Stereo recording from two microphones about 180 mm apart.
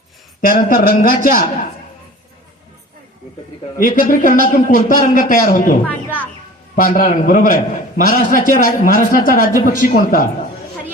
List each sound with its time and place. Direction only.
0.4 s a man's voice: 50° left (ahead or behind)
3.8 s a man's voice: 50° left (ahead or behind)
6.7 s a man's voice: 50° left (ahead or behind)